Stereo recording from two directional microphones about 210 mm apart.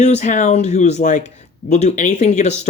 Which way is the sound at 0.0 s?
35° left (ahead or behind).